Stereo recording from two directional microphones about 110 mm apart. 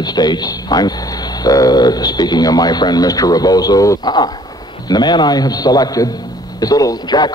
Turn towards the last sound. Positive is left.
turn(degrees=40)  # may be behind; listen again after turning